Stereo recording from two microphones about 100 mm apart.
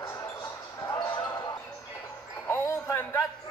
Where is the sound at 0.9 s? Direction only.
50° left (ahead or behind).